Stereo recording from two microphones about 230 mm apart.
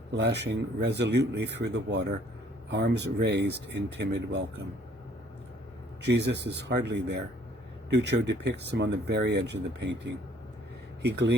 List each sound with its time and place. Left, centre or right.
0.1 s speech: right
6.0 s speech: right
11.0 s speech: right